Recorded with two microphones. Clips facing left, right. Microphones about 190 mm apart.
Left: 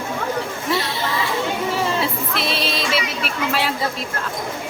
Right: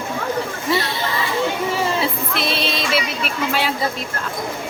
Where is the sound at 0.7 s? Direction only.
Centre (ahead or behind).